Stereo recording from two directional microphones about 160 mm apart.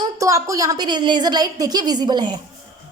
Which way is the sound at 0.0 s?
20° right (ahead or behind).